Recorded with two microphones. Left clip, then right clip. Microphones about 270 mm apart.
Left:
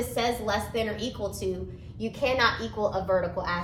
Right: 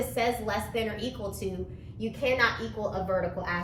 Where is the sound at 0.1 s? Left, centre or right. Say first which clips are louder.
Left 1 dB; centre.